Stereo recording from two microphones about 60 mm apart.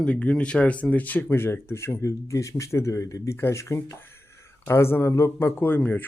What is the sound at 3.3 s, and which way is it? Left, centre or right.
Speech, left.